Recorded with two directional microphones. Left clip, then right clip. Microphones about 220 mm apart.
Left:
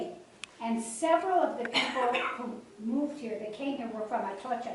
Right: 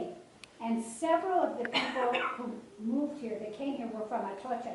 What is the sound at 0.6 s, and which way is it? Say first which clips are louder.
A woman's voice: left 2 dB; 10° right (ahead or behind).